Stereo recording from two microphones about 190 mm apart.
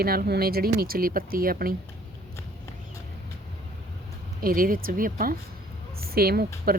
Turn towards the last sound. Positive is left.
turn(degrees=-55)  # may be behind; listen again after turning